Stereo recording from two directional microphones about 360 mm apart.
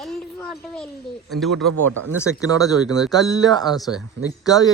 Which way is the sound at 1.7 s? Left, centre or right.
Right.